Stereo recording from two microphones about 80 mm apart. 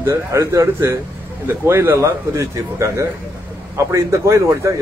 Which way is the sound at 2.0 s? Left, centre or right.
Right.